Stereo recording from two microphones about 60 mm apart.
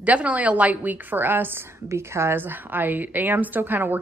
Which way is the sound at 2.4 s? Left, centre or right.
Right.